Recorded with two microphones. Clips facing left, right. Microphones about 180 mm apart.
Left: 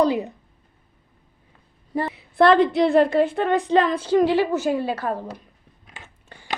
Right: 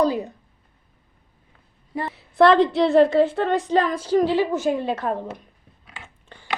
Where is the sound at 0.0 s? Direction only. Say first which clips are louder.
Left 1 dB; 20° left (ahead or behind).